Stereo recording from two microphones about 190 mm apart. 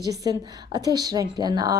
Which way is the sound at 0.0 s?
20° right (ahead or behind).